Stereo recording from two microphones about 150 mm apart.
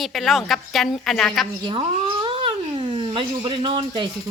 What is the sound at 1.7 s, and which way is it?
Cat, 35° right (ahead or behind).